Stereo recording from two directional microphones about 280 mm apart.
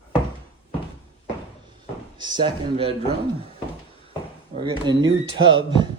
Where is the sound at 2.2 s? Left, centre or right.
Centre.